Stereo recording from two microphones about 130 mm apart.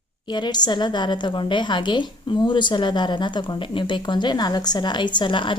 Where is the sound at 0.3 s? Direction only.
35° left (ahead or behind).